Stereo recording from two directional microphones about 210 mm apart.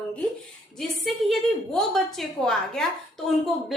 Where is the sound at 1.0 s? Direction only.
Centre (ahead or behind).